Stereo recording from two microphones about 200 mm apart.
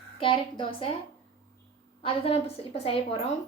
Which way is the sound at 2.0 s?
25° left (ahead or behind).